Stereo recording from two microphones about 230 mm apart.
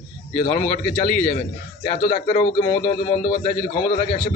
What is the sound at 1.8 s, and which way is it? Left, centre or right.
Speech, left.